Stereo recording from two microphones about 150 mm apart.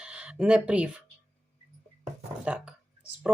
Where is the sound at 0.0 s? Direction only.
5° right (ahead or behind).